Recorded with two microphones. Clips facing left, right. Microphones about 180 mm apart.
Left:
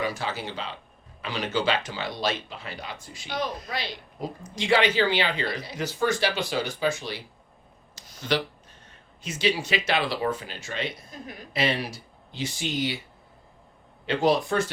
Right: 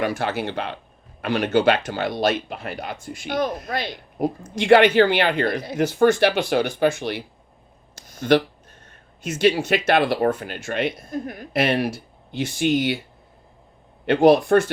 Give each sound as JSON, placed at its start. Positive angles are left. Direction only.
{"t": 0.0, "sound": "speech", "side_deg": -60}
{"t": 7.9, "sound": "a sound", "side_deg": -50}
{"t": 8.9, "sound": "speech", "side_deg": -50}
{"t": 14.1, "sound": "speech", "side_deg": -60}